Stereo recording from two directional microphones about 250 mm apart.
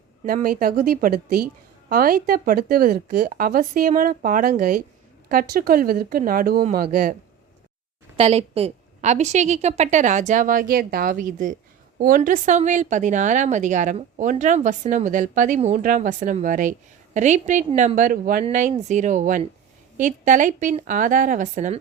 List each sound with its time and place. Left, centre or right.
0.3 s a woman's voice: right
8.1 s a woman's voice: right